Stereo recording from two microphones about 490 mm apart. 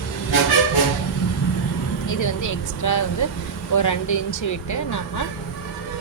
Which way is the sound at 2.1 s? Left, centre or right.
Left.